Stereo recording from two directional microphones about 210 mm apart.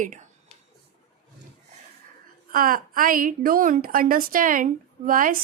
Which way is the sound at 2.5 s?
40° right (ahead or behind).